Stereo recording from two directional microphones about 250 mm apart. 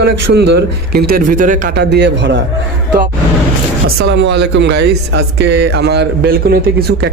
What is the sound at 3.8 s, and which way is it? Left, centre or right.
Speech, right.